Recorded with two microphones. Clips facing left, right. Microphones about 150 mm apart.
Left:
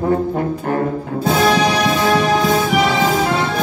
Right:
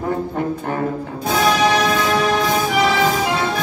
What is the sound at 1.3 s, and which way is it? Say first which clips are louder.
Music: even; 25° left (ahead or behind).